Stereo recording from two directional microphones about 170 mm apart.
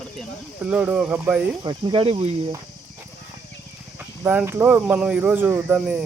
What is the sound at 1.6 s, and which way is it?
Speech, 30° right (ahead or behind).